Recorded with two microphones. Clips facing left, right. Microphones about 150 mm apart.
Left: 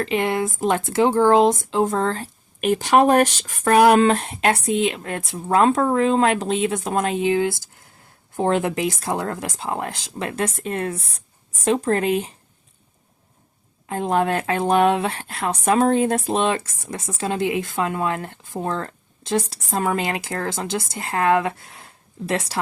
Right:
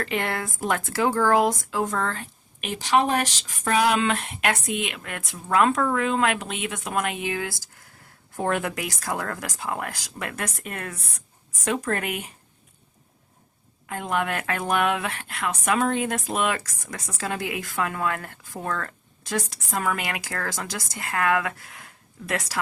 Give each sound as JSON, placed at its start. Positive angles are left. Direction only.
{"t": 0.0, "sound": "speech", "side_deg": 20}
{"t": 13.8, "sound": "speech", "side_deg": 30}